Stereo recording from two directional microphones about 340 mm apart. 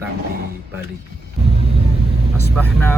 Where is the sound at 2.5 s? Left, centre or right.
Centre.